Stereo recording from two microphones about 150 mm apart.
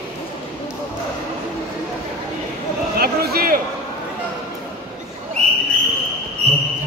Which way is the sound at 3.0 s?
90° right.